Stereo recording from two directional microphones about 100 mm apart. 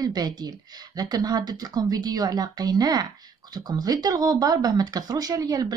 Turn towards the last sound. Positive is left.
turn(degrees=-40)  # may be behind; listen again after turning